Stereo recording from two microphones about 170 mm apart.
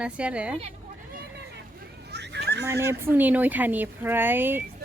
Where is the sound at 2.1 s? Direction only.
80° right.